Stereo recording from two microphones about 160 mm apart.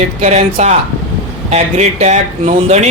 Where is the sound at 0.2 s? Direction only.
45° right (ahead or behind).